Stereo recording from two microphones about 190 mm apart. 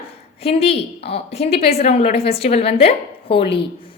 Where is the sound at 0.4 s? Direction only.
30° left (ahead or behind).